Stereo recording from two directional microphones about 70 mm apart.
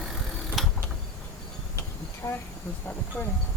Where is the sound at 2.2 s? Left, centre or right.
Left.